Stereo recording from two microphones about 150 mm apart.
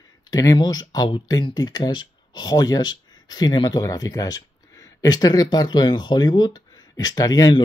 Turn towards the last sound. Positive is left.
turn(degrees=25)  # may be behind; listen again after turning